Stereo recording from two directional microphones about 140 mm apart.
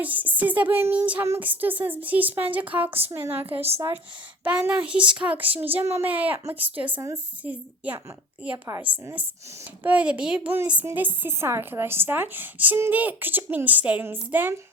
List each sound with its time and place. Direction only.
0.0 s a woman's voice: 10° right (ahead or behind)
4.4 s a woman's voice: 10° right (ahead or behind)
9.8 s a woman's voice: 10° right (ahead or behind)